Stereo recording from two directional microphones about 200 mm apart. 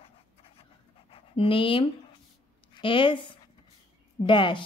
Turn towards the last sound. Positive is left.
turn(degrees=25)  # may be behind; listen again after turning